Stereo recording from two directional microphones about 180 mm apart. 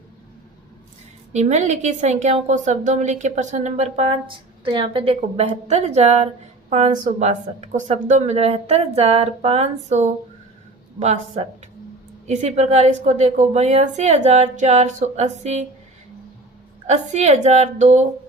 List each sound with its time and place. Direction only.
1.3 s a woman's voice: 40° right (ahead or behind)
16.8 s a woman's voice: 40° right (ahead or behind)